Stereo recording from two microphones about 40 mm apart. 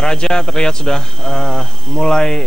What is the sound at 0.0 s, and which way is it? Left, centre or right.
Speech, centre.